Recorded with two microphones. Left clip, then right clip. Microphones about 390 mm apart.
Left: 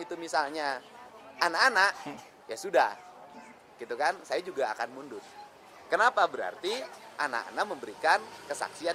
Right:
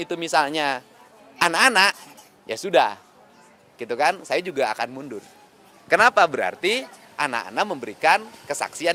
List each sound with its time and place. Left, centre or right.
0.0 s a man's voice: right
5.9 s a man's voice: right